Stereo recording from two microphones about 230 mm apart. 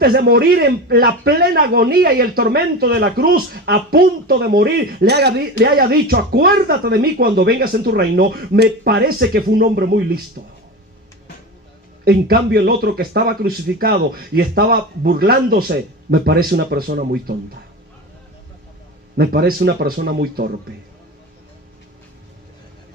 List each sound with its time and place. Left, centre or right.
0.0 s speech: right
12.0 s speech: right
19.1 s speech: right